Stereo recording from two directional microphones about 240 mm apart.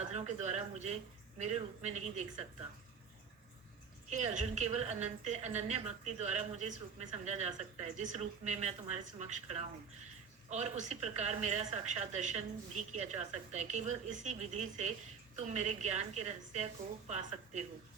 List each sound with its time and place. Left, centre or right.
0.0 s a woman's voice: right
4.1 s a woman's voice: right